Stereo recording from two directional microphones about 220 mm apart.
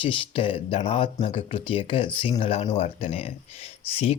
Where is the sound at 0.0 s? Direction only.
25° left (ahead or behind).